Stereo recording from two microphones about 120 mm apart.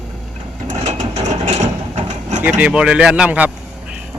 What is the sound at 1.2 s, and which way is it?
Vehicle, 70° right (ahead or behind).